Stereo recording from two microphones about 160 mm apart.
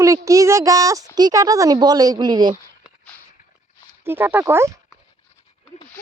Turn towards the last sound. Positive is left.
turn(degrees=-15)  # may be behind; listen again after turning